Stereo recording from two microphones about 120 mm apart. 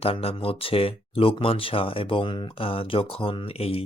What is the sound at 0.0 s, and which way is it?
Speech, 55° left (ahead or behind).